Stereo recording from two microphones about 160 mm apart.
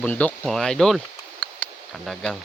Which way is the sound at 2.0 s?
Centre (ahead or behind).